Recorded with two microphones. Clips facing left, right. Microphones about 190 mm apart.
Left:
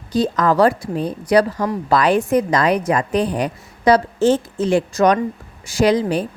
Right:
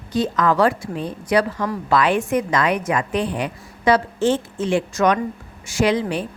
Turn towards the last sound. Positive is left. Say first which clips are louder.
# left 3 dB
turn(degrees=40)  # may be behind; listen again after turning